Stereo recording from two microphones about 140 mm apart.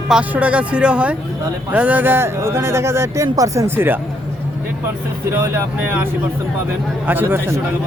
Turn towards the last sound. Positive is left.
turn(degrees=-15)  # may be behind; listen again after turning